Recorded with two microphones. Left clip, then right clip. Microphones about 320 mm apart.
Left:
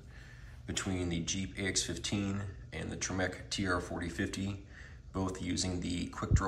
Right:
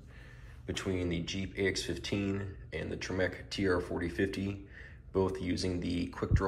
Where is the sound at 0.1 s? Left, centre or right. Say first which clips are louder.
Even; centre.